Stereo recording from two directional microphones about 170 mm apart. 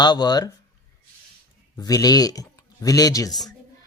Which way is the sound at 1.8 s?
20° left (ahead or behind).